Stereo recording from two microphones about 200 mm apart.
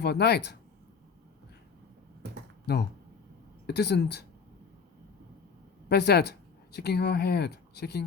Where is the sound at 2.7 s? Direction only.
55° left (ahead or behind).